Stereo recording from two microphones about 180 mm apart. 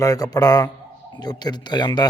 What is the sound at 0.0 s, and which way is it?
A man's voice, 20° left (ahead or behind).